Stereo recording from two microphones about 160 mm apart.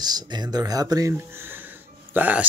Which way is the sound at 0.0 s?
25° right (ahead or behind).